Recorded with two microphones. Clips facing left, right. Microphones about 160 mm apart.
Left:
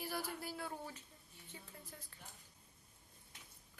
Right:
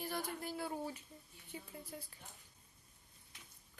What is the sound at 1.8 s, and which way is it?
Speech, 10° right (ahead or behind).